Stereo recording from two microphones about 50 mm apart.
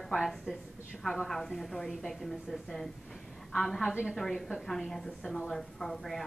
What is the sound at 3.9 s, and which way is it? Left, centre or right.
Speech, right.